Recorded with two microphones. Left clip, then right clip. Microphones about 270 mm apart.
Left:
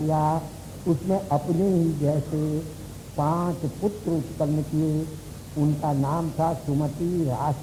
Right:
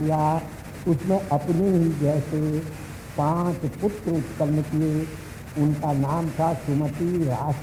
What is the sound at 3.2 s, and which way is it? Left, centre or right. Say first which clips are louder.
Speech: right 1 dB; left.